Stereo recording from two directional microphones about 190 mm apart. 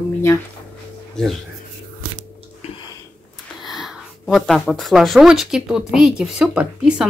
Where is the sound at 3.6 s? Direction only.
Centre (ahead or behind).